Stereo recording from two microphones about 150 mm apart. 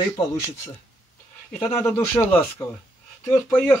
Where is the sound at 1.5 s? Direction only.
20° left (ahead or behind).